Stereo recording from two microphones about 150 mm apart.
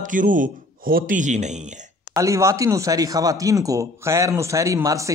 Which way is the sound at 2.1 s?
20° right (ahead or behind).